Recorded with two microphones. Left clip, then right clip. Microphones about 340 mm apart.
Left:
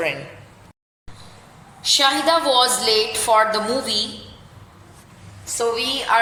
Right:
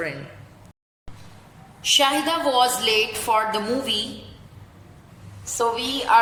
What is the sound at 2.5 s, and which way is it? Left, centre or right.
Speech, centre.